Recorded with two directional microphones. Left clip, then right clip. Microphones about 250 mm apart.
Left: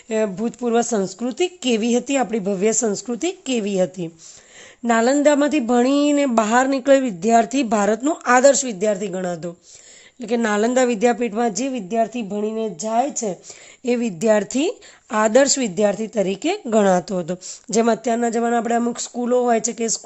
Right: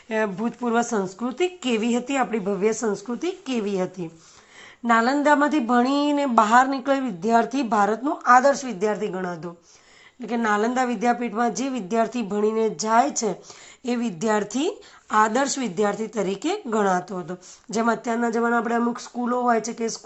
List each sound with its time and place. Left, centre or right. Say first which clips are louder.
0.1 s speech: left 3 dB; left